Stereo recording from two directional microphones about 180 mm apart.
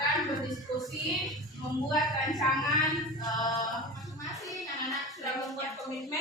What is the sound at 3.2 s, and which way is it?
Chant, 20° left (ahead or behind).